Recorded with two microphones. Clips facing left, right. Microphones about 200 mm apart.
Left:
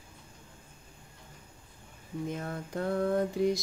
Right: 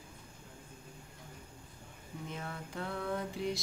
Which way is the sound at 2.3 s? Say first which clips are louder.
Left 7 dB; 45° left (ahead or behind).